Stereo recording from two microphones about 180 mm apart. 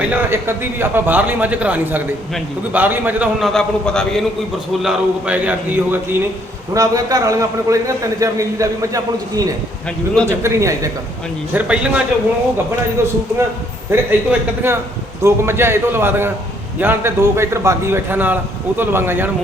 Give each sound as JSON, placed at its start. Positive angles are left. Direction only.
{"t": 0.0, "sound": "a man's voice", "side_deg": -10}
{"t": 11.5, "sound": "a man's voice", "side_deg": -5}
{"t": 13.9, "sound": "a man's voice", "side_deg": -15}